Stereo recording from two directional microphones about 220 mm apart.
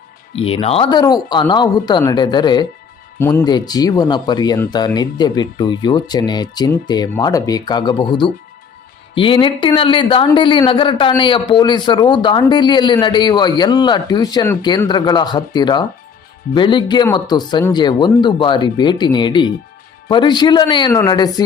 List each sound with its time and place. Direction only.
0.3 s a man's voice: 25° left (ahead or behind)